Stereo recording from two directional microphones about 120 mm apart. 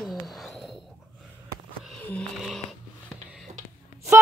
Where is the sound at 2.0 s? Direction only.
10° left (ahead or behind).